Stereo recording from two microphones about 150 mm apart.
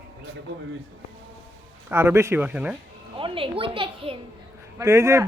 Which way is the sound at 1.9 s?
15° right (ahead or behind).